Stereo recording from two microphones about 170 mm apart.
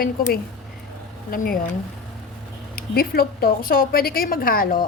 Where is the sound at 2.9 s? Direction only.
60° left (ahead or behind).